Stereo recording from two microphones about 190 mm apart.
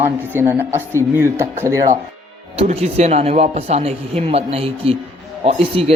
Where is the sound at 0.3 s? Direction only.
10° right (ahead or behind).